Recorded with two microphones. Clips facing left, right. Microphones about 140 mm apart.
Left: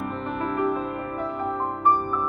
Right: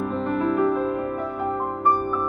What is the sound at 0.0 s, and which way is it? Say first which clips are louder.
Music: right 5 dB; 5° left (ahead or behind).